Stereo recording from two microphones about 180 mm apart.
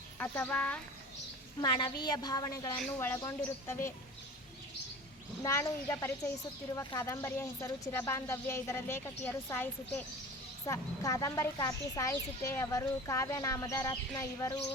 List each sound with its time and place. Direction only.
0.2 s speech: 5° left (ahead or behind)
1.6 s a woman's voice: 25° left (ahead or behind)
5.4 s speech: 15° left (ahead or behind)